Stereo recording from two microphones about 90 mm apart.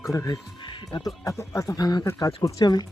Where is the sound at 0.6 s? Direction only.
60° left (ahead or behind).